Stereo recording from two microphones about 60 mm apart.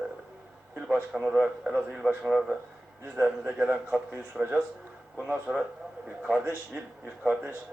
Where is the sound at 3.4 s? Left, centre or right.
Right.